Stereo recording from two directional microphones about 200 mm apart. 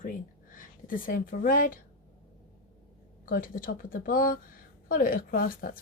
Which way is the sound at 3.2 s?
45° left (ahead or behind).